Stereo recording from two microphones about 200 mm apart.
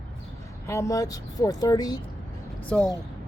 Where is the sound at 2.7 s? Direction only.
5° left (ahead or behind).